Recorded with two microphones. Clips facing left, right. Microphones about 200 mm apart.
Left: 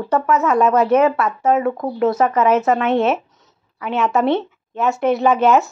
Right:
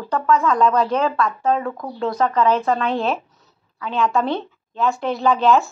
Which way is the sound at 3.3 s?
20° left (ahead or behind).